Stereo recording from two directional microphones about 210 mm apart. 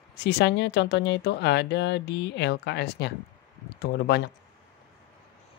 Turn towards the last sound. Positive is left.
turn(degrees=50)  # may be behind; listen again after turning